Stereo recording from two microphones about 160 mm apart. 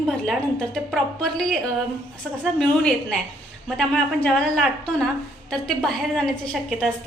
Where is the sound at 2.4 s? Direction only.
5° left (ahead or behind).